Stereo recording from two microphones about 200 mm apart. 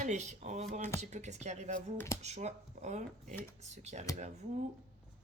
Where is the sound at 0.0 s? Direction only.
35° right (ahead or behind).